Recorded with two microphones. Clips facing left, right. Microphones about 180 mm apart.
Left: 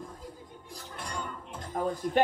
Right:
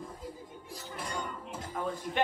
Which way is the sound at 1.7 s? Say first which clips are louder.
Left 7 dB; 40° left (ahead or behind).